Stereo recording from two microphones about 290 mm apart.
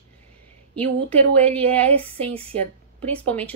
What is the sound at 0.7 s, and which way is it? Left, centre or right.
Speech, centre.